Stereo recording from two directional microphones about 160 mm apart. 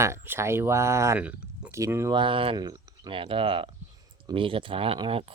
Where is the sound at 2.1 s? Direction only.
35° right (ahead or behind).